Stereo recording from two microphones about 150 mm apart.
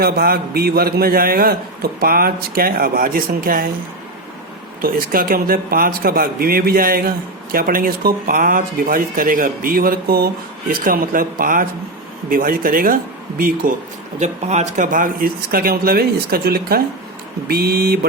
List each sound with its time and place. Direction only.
0.0 s a man's voice: 90° right
4.8 s speech: 75° right (ahead or behind)
14.2 s a man's voice: 50° right (ahead or behind); by 18.0 s 90° right